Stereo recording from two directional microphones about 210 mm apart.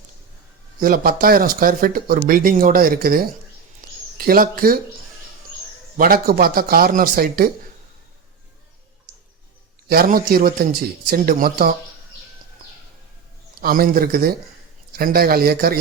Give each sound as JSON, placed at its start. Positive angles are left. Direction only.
{"t": 0.8, "sound": "speech", "side_deg": -45}
{"t": 6.0, "sound": "speech", "side_deg": -45}
{"t": 9.9, "sound": "speech", "side_deg": -45}
{"t": 13.6, "sound": "speech", "side_deg": -45}